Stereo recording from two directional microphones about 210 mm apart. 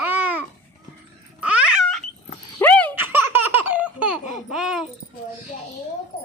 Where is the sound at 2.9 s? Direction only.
10° right (ahead or behind).